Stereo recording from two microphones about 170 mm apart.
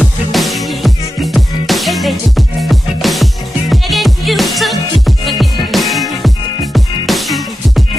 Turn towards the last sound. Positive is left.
turn(degrees=0)  # may be behind; listen again after turning